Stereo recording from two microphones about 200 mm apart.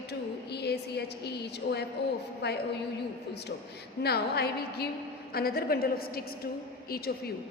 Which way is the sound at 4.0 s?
55° left (ahead or behind).